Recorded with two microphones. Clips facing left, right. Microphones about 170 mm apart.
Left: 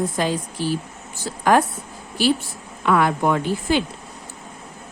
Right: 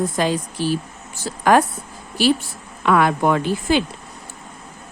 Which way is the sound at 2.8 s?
85° right.